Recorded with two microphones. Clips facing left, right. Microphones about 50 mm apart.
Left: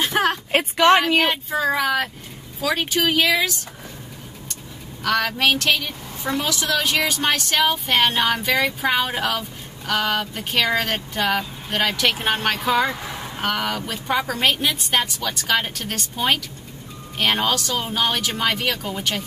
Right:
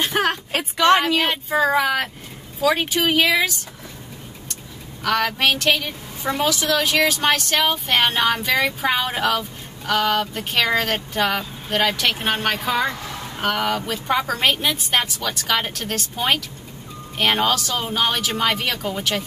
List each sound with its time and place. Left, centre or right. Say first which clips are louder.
0.0 s a sound: even; centre
0.5 s a woman's voice: left 3 dB; left
1.5 s speech: right 2 dB; centre
5.0 s speech: even; centre
13.0 s a sound: even; centre
13.4 s speech: right 2 dB; centre
17.2 s speech: right 1 dB; centre